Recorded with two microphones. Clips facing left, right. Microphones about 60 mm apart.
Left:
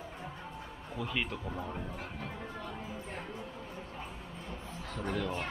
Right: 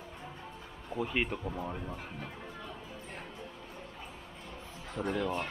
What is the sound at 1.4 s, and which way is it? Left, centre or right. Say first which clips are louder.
Speech: right 1 dB; centre.